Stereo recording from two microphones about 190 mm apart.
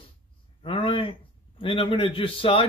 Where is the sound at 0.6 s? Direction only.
25° left (ahead or behind).